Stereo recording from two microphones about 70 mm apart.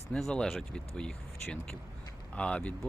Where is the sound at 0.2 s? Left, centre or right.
Centre.